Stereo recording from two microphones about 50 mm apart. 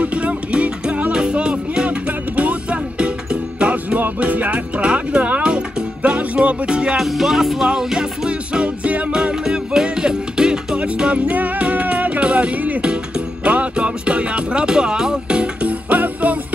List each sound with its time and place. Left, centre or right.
0.0 s music: right
7.0 s music: centre; by 9.1 s right
9.1 s music: centre; by 12.8 s right
12.8 s music: centre
15.9 s music: right